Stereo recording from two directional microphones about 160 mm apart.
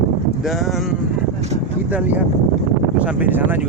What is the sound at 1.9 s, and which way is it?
Speech, 10° right (ahead or behind).